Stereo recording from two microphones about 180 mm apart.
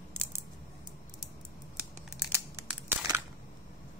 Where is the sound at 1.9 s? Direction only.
15° right (ahead or behind).